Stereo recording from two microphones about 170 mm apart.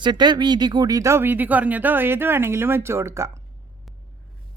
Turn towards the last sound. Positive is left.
turn(degrees=-15)  # may be behind; listen again after turning